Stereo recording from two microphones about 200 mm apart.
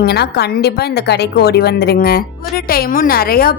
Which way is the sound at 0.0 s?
55° left (ahead or behind).